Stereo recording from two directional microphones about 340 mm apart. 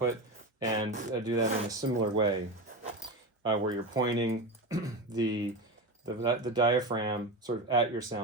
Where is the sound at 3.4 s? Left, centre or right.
Centre.